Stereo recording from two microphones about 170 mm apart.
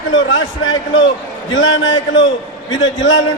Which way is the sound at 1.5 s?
90° left.